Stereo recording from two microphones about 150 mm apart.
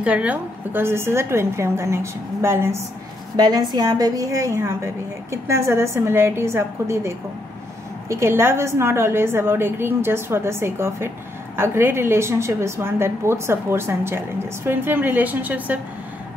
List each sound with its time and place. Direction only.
0.0 s a woman's voice: 10° right (ahead or behind)
3.4 s a woman's voice: 25° right (ahead or behind); by 15.8 s 10° right (ahead or behind)